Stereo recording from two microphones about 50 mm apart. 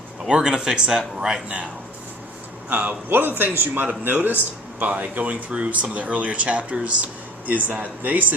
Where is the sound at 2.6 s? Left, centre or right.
Right.